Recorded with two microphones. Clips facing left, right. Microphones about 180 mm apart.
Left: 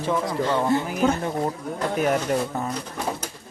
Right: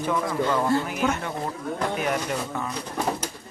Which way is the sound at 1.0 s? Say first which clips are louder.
Left 4 dB; 35° left (ahead or behind).